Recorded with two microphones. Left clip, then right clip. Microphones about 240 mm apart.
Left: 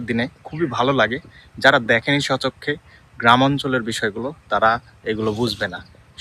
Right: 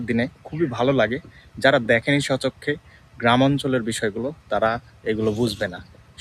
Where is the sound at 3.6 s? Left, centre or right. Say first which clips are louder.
Left 2 dB; left.